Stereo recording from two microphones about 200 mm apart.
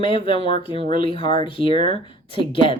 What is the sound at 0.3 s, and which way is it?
Speech, 25° left (ahead or behind).